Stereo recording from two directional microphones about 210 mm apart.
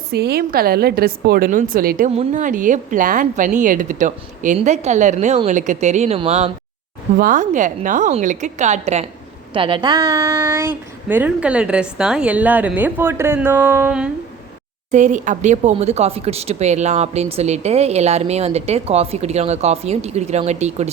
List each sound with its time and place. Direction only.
0.1 s a woman's voice: 50° right (ahead or behind); by 14.1 s 5° right (ahead or behind)
14.9 s speech: 35° right (ahead or behind)